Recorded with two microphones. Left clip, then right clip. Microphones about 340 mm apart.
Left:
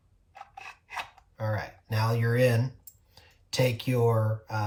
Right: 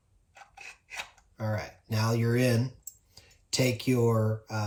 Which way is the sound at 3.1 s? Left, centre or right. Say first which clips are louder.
Even; left.